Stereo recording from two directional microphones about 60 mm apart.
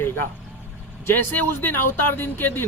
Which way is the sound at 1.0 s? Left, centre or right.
Left.